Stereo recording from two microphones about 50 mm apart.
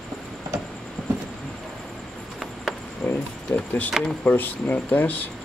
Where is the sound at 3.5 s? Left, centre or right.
Left.